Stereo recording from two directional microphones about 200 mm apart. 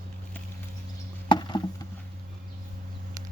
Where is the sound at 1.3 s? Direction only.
20° left (ahead or behind).